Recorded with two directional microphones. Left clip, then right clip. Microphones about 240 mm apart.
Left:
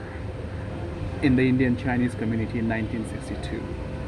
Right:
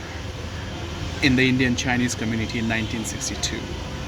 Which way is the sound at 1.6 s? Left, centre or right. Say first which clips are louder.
Right 3 dB; centre.